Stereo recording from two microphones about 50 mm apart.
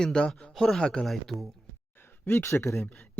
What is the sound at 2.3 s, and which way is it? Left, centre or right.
Speech, left.